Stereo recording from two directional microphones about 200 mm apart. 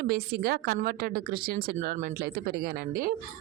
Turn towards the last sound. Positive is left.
turn(degrees=-50)  # may be behind; listen again after turning